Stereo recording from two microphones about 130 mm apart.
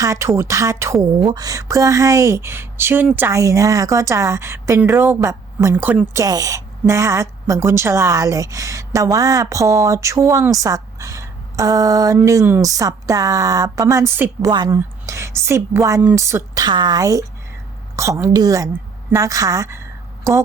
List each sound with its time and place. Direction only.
0.0 s a woman's voice: 25° right (ahead or behind)
6.2 s a woman's voice: 25° right (ahead or behind)
14.4 s a woman's voice: 30° right (ahead or behind)
16.6 s a woman's voice: 35° right (ahead or behind)